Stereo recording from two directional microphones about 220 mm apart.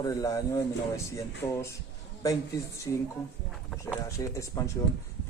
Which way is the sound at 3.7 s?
15° left (ahead or behind).